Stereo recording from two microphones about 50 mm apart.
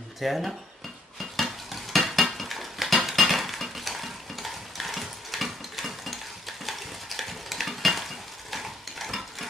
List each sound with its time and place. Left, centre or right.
0.2 s dishes: centre
1.3 s stir: centre